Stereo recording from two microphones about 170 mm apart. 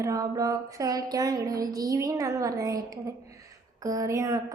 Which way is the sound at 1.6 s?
20° right (ahead or behind).